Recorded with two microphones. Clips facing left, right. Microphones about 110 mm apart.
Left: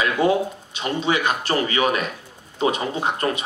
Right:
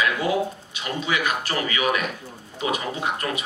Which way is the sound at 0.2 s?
30° left (ahead or behind).